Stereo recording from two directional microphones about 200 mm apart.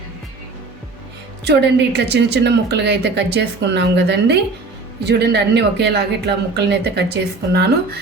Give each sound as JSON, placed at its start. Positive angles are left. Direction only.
{"t": 1.5, "sound": "speech", "side_deg": -55}